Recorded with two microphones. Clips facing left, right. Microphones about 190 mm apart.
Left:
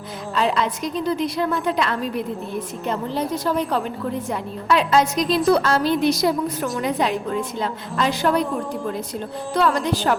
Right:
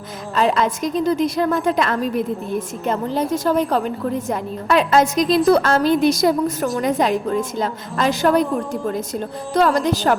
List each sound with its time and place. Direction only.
0.3 s a woman's voice: 45° right (ahead or behind)